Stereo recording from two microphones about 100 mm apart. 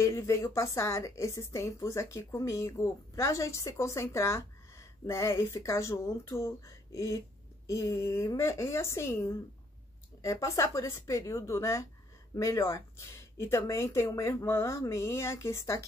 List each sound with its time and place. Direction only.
0.0 s a woman's voice: 30° left (ahead or behind)